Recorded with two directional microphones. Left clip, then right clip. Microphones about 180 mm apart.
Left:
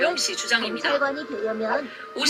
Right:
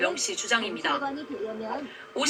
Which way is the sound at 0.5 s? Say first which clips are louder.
Left 3 dB; 20° left (ahead or behind).